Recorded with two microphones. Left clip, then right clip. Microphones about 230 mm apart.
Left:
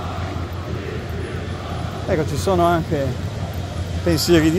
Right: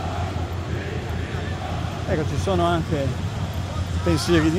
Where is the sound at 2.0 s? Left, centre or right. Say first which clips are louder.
Left 5 dB; left.